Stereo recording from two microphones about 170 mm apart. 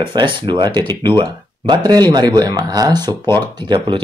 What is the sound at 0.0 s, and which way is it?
Speech, 30° right (ahead or behind).